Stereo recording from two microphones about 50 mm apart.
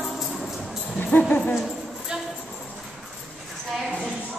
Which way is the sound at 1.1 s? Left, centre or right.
Left.